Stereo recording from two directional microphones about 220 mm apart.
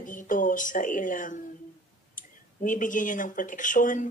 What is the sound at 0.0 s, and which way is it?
Speech, 35° left (ahead or behind).